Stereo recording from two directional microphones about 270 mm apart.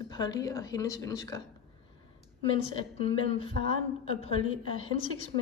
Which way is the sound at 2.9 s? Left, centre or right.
Left.